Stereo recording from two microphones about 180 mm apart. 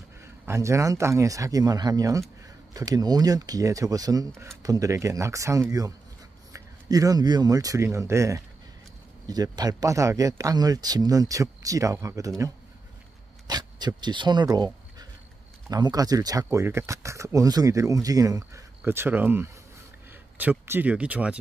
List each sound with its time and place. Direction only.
0.5 s speech: 15° right (ahead or behind)
13.5 s a sound: 25° right (ahead or behind)
15.7 s speech: 20° right (ahead or behind); by 21.4 s 5° right (ahead or behind)